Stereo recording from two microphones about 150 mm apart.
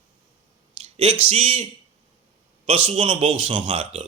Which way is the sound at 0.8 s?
40° right (ahead or behind).